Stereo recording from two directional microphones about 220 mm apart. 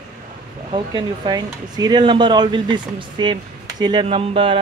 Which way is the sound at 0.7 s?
20° right (ahead or behind).